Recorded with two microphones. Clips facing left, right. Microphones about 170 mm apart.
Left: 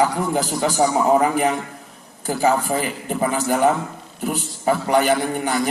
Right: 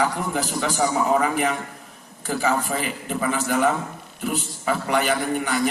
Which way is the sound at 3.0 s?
40° left (ahead or behind).